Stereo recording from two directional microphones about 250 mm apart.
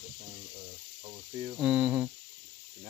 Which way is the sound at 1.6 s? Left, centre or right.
Centre.